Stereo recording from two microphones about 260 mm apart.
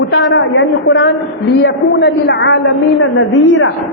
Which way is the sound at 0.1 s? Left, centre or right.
Left.